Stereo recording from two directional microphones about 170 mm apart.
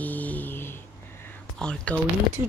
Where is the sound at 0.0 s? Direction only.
10° left (ahead or behind).